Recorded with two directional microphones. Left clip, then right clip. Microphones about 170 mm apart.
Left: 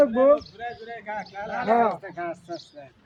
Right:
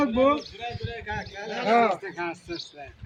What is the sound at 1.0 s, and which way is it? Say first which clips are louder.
Speech: left 2 dB; 50° left (ahead or behind).